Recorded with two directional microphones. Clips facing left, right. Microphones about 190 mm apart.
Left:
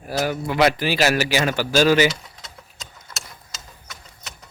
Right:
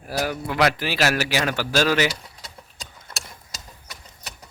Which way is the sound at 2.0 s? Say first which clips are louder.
Left 4 dB; 35° right (ahead or behind).